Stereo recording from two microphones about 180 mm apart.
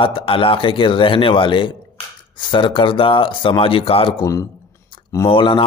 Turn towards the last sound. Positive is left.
turn(degrees=30)  # may be behind; listen again after turning